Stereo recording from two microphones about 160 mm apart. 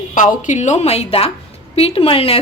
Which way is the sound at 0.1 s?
50° left (ahead or behind).